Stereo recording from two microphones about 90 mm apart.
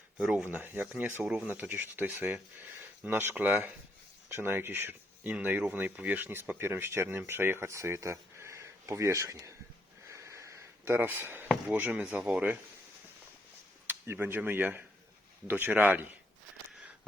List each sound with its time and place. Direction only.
0.2 s speech: 10° right (ahead or behind); by 9.6 s 35° right (ahead or behind)
10.1 s a sound: 35° right (ahead or behind)
11.7 s speech: 20° right (ahead or behind)
13.8 s speech: 25° right (ahead or behind)